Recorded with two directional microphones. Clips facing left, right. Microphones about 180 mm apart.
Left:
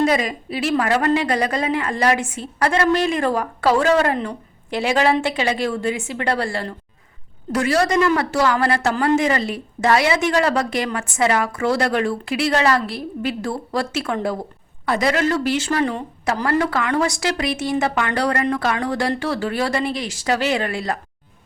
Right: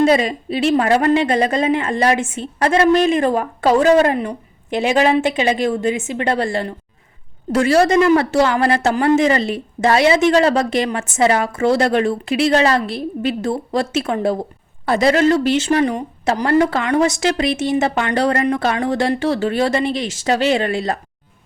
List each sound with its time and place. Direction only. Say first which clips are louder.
0.0 s speech: right 4 dB; 30° right (ahead or behind)